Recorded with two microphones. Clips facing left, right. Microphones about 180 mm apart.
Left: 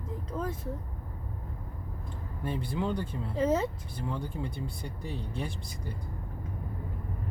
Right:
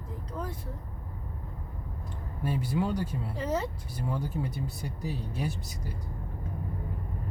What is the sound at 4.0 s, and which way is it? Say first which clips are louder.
Speech: right 2 dB; 10° right (ahead or behind).